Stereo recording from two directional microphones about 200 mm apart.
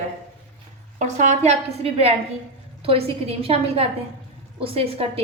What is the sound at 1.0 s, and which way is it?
A woman's voice, 40° right (ahead or behind).